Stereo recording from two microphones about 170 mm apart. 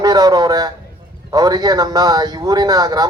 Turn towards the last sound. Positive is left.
turn(degrees=-20)  # may be behind; listen again after turning